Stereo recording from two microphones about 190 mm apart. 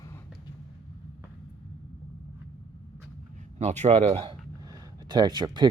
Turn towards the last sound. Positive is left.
turn(degrees=-20)  # may be behind; listen again after turning